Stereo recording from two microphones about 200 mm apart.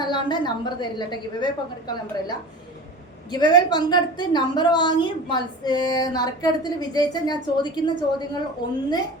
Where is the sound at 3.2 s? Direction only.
20° left (ahead or behind).